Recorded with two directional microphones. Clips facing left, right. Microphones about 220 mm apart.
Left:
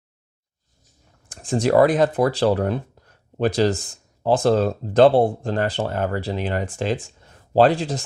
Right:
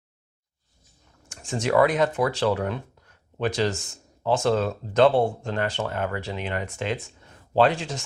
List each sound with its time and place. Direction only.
1.2 s speech: 35° left (ahead or behind)